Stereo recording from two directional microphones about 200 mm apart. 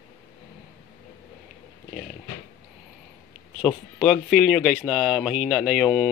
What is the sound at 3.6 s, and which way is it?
Speech, centre (ahead or behind).